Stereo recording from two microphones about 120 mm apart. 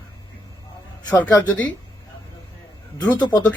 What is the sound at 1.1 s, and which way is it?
Speech, 10° left (ahead or behind).